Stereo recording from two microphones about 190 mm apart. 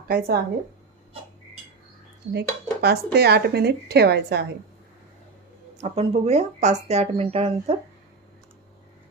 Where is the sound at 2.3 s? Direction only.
60° right (ahead or behind).